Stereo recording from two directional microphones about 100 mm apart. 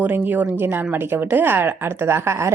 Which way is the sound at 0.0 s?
15° right (ahead or behind).